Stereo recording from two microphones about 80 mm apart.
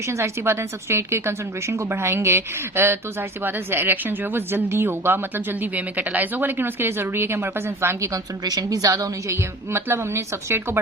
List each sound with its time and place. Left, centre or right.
0.1 s a woman's voice: right
8.1 s a woman's voice: right
9.7 s speech: right